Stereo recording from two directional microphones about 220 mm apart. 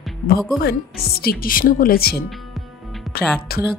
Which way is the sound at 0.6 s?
45° left (ahead or behind).